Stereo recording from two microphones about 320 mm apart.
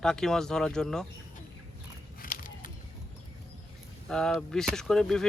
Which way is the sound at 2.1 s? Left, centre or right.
Left.